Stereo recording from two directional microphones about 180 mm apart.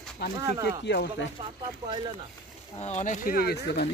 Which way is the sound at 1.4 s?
25° right (ahead or behind).